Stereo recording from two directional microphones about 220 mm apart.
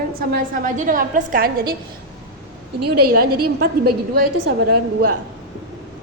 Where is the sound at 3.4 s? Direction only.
45° right (ahead or behind).